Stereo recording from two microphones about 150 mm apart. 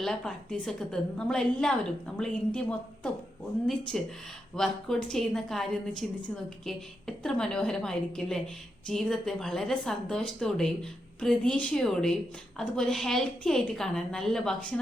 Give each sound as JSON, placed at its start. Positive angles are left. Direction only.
{"t": 0.0, "sound": "a woman's voice", "side_deg": 0}